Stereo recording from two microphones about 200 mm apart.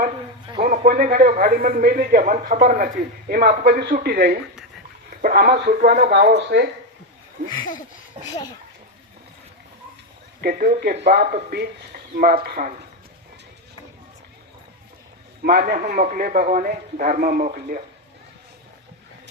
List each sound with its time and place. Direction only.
0.6 s a man's voice: 40° right (ahead or behind)
6.1 s speech: 55° right (ahead or behind)
8.1 s a child's voice: 30° right (ahead or behind)
10.4 s a man's voice: 45° right (ahead or behind)
15.4 s a man's voice: 50° right (ahead or behind)